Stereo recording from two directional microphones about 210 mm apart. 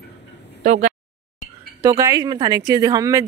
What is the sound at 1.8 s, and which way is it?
Speech, 15° right (ahead or behind).